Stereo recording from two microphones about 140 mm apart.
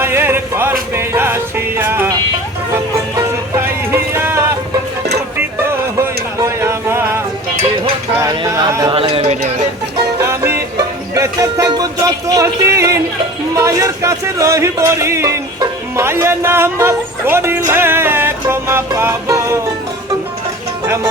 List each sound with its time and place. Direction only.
0.0 s music: 15° right (ahead or behind)
3.9 s music: 15° right (ahead or behind)
6.0 s a sound: 20° right (ahead or behind)
8.2 s a sound: 20° right (ahead or behind)
8.9 s a sound: 40° right (ahead or behind)
10.2 s music: 20° right (ahead or behind)
13.5 s a man's voice: 20° right (ahead or behind)
17.7 s music: 15° right (ahead or behind)
20.8 s music: 20° right (ahead or behind)